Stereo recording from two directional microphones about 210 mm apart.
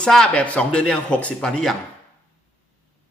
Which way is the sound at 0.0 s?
5° left (ahead or behind).